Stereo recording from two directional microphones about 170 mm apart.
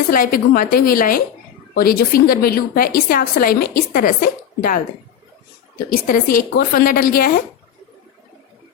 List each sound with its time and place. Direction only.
0.1 s a woman's voice: 55° left (ahead or behind)